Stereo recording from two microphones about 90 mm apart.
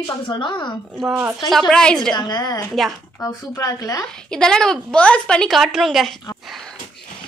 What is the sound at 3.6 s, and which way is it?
Speech, 40° left (ahead or behind).